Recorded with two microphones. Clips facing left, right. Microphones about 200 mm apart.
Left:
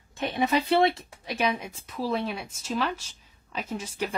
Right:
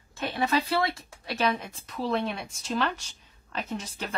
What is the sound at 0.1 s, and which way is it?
Speech, 20° left (ahead or behind).